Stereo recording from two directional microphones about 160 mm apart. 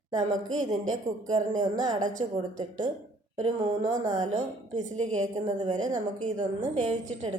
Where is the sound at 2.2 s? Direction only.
35° right (ahead or behind).